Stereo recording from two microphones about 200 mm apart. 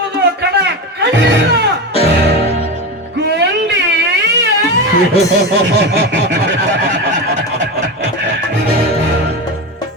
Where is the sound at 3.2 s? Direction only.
55° right (ahead or behind).